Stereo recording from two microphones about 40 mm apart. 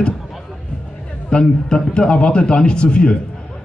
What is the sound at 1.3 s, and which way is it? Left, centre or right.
A man's voice, left.